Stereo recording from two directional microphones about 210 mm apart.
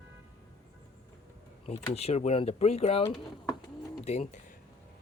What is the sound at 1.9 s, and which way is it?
Speech, 30° left (ahead or behind).